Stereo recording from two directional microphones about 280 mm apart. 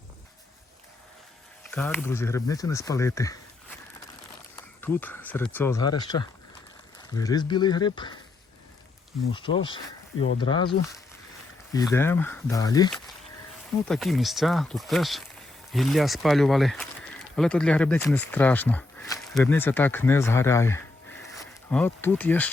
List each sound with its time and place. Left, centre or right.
1.7 s speech: centre
9.3 s speech: centre
13.8 s speech: centre